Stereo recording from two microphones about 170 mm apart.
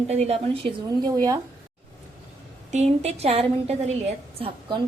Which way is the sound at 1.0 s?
20° right (ahead or behind).